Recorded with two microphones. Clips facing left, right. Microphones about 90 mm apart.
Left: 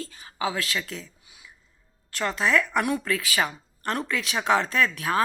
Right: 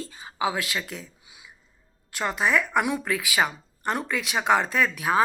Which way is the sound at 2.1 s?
10° right (ahead or behind).